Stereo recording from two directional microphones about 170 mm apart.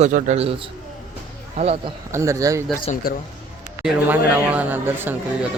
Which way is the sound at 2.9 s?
40° left (ahead or behind).